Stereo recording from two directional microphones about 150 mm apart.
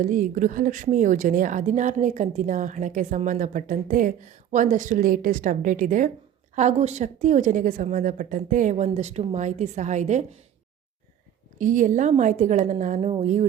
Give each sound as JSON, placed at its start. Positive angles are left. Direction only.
{"t": 0.0, "sound": "a woman's voice", "side_deg": -65}
{"t": 6.6, "sound": "a woman's voice", "side_deg": -50}
{"t": 11.6, "sound": "a woman's voice", "side_deg": -60}